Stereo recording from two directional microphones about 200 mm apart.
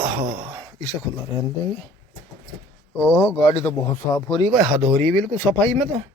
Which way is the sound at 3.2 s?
10° left (ahead or behind).